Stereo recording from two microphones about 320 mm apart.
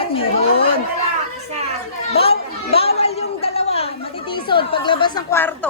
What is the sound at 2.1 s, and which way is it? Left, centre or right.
Chatter, centre.